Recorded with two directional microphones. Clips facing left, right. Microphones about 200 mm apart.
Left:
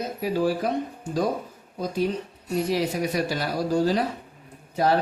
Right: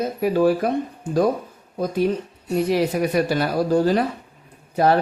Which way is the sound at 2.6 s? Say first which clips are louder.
Right 5 dB; 60° right (ahead or behind).